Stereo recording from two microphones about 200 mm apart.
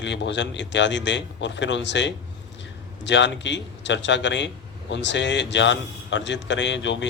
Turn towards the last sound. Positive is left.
turn(degrees=65)  # may be behind; listen again after turning